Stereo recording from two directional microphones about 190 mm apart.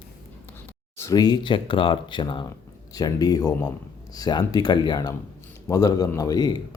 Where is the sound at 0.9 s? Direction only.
20° left (ahead or behind).